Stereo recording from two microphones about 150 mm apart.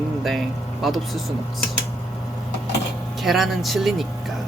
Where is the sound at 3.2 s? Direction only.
Centre (ahead or behind).